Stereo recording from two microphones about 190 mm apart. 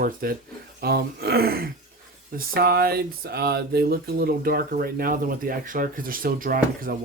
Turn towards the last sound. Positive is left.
turn(degrees=-50)  # may be behind; listen again after turning